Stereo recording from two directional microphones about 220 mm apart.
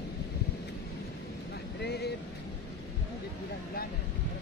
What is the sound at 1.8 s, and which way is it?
Vehicle, 45° left (ahead or behind).